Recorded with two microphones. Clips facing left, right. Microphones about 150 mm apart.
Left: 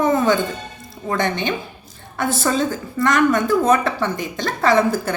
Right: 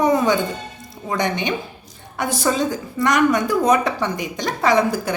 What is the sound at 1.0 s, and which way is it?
A woman's voice, 15° right (ahead or behind).